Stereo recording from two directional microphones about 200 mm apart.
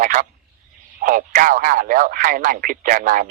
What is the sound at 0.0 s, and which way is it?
Speech, 45° right (ahead or behind).